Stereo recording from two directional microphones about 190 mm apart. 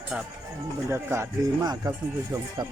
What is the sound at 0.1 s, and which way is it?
Speech, 5° right (ahead or behind).